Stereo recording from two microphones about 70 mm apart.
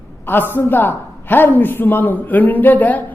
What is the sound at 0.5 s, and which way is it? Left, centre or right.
Speech, left.